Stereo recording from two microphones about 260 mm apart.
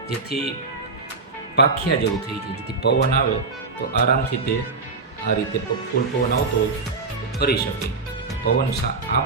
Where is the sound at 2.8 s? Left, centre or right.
Left.